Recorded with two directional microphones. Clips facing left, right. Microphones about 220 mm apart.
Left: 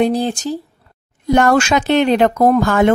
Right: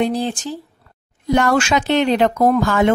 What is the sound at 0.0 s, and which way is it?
Speech, 45° left (ahead or behind).